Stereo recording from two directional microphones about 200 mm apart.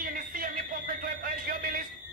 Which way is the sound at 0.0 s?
45° right (ahead or behind).